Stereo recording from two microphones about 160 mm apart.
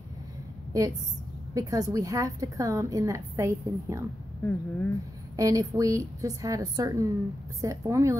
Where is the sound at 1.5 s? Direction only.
20° right (ahead or behind).